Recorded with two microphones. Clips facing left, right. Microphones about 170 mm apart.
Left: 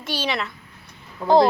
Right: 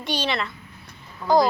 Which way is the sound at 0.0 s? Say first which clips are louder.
Even; 5° left (ahead or behind).